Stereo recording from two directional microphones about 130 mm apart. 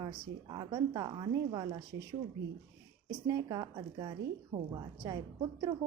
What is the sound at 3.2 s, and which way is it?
Speech, 30° right (ahead or behind).